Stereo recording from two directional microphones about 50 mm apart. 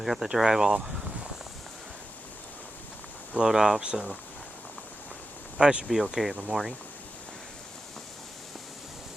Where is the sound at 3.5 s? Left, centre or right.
Centre.